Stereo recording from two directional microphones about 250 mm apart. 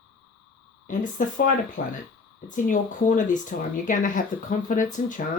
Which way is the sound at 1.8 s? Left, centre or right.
Left.